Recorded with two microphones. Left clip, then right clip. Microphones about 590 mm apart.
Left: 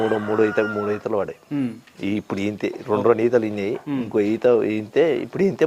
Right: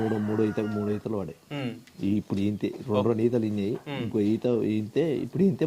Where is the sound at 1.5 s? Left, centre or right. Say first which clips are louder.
Left 8 dB; right.